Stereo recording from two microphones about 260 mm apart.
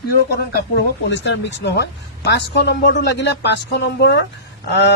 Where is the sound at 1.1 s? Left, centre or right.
Left.